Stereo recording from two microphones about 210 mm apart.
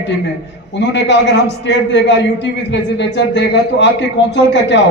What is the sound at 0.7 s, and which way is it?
A man's voice, 55° left (ahead or behind).